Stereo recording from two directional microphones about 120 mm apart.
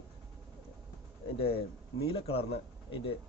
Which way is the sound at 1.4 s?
50° left (ahead or behind).